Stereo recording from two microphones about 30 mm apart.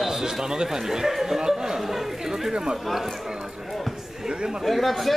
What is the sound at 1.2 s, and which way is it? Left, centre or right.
Chatter, centre.